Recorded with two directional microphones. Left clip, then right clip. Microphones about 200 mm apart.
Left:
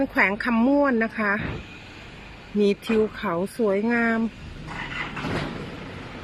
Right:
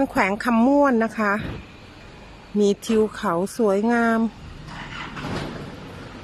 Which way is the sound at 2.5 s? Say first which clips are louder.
Right 2 dB; 15° right (ahead or behind).